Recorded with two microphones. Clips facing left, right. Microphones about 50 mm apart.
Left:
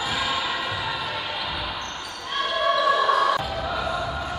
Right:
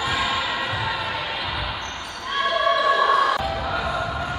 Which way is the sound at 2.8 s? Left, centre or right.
Centre.